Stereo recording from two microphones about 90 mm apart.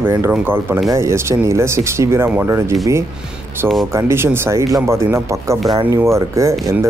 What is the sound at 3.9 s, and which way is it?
Speech, 30° right (ahead or behind).